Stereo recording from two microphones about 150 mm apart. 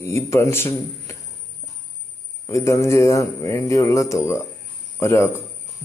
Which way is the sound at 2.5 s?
20° left (ahead or behind).